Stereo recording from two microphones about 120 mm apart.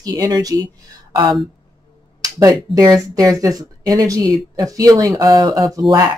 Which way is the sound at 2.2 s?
30° right (ahead or behind).